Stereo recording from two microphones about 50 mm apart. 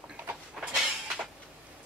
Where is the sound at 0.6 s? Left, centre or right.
Centre.